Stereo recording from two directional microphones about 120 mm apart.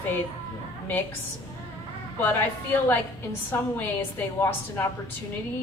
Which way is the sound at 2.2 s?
15° left (ahead or behind).